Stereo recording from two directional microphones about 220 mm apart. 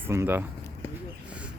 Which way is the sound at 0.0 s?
10° right (ahead or behind).